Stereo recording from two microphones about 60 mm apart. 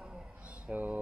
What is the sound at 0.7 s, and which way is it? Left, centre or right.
Speech, right.